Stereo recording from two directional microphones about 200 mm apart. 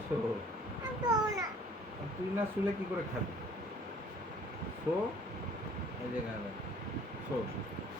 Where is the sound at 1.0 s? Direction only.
20° right (ahead or behind).